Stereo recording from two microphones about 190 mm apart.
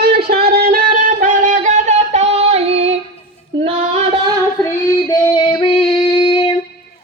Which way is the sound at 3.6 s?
30° right (ahead or behind).